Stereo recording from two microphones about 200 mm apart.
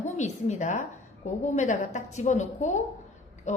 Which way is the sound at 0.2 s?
35° left (ahead or behind).